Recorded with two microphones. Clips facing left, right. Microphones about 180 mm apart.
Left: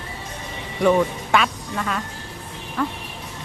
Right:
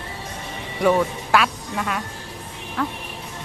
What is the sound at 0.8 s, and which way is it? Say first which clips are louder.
Speech: left 1 dB; 5° right (ahead or behind).